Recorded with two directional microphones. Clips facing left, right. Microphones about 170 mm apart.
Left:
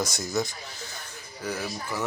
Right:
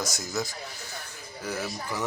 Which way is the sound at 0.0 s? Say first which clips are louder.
Left 3 dB; centre (ahead or behind).